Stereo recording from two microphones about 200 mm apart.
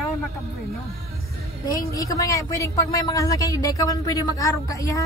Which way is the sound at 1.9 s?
15° left (ahead or behind).